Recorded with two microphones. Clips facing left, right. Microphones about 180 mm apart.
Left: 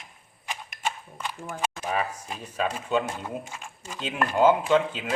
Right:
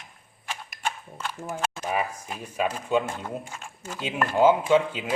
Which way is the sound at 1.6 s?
15° left (ahead or behind).